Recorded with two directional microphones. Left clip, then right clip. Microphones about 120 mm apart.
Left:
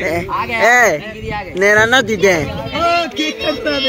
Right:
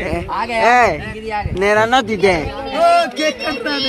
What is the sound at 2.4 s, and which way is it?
A man's voice, 40° right (ahead or behind).